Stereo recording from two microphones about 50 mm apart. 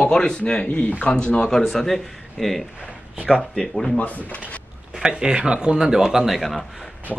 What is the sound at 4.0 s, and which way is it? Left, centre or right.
Speech, left.